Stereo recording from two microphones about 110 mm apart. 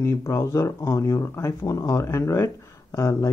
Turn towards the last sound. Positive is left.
turn(degrees=30)  # may be behind; listen again after turning